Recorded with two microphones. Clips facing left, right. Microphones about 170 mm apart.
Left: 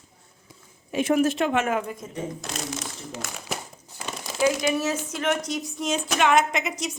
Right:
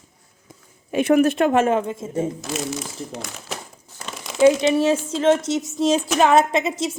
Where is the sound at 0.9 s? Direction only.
60° right (ahead or behind).